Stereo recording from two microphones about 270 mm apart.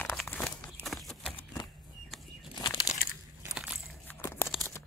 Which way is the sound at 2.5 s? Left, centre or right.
Centre.